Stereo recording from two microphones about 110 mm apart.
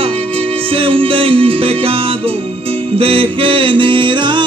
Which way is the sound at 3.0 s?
60° right (ahead or behind).